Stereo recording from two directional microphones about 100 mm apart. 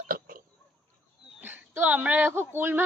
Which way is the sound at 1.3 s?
20° right (ahead or behind).